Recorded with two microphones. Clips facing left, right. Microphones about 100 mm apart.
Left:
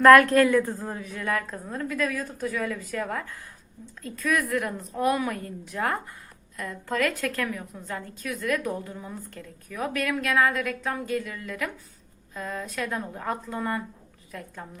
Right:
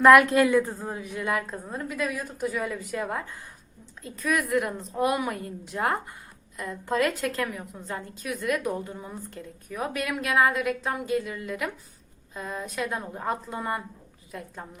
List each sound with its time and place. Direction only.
0.0 s a woman's voice: 15° right (ahead or behind)